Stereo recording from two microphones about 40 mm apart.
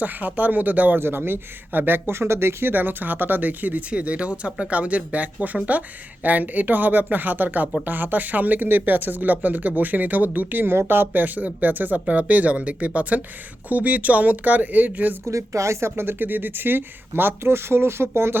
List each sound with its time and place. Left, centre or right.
0.0 s speech: right
0.9 s speech: right
2.0 s speech: right
2.7 s speech: right
10.7 s speech: right
16.0 s speech: right